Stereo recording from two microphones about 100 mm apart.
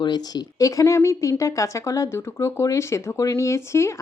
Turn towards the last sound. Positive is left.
turn(degrees=25)  # may be behind; listen again after turning